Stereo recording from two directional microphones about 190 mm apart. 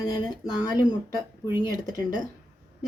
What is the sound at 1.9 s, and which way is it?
Speech, 20° left (ahead or behind).